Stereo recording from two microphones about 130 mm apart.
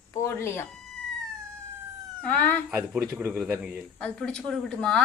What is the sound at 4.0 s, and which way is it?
A woman's voice, 5° left (ahead or behind).